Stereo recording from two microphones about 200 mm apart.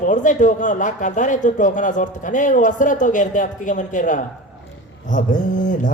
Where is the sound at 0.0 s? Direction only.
40° left (ahead or behind).